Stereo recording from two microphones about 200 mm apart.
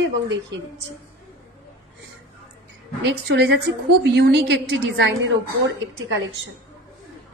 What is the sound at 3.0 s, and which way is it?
A woman's voice, 55° right (ahead or behind).